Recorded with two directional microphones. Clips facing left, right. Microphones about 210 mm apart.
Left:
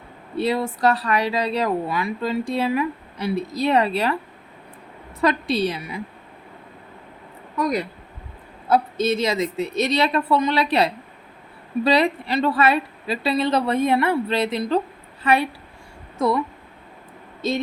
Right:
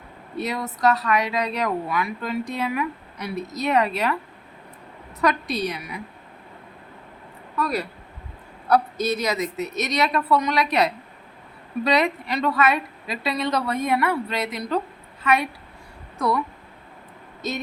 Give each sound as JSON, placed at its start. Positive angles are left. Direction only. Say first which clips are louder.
{"t": 0.3, "sound": "speech", "louder": "left 6 dB", "side_deg": 30}
{"t": 5.2, "sound": "speech", "louder": "left 3 dB", "side_deg": 30}
{"t": 7.5, "sound": "a woman's voice", "louder": "left 3 dB", "side_deg": 15}
{"t": 17.4, "sound": "speech", "louder": "left 6 dB", "side_deg": 30}